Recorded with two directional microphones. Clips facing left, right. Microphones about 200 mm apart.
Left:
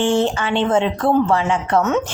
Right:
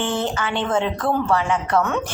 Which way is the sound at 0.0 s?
25° left (ahead or behind).